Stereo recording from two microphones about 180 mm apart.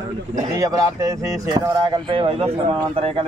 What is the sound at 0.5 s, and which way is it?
Speech, 20° right (ahead or behind).